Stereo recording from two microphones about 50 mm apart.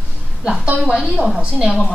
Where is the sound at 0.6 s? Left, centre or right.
Right.